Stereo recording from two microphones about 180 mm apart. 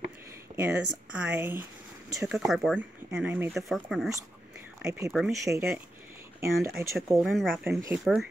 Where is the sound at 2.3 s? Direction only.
Centre (ahead or behind).